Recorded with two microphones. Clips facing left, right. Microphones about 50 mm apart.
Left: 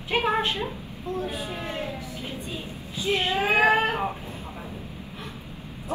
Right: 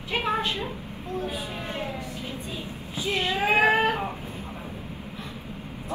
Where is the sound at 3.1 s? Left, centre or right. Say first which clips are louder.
Even; left.